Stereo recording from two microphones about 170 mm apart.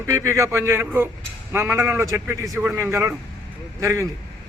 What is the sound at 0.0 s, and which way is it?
A man's voice, 15° right (ahead or behind).